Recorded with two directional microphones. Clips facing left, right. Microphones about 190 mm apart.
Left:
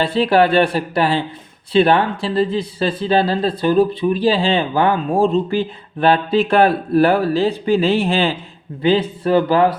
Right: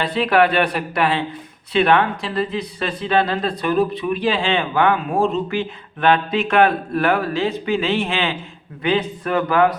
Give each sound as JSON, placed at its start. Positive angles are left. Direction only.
{"t": 0.0, "sound": "speech", "side_deg": 30}